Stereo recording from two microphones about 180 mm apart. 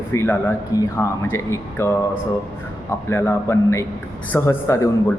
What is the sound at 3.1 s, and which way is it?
A man's voice, 15° left (ahead or behind).